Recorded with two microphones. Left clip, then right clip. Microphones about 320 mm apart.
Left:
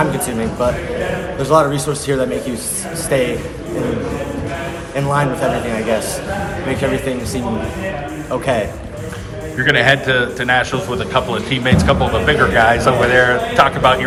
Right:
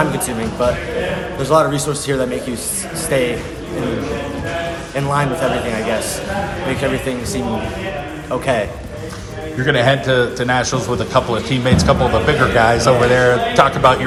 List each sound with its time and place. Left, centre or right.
0.6 s a man's voice: centre
4.9 s a man's voice: centre
8.3 s a man's voice: centre
9.6 s a man's voice: centre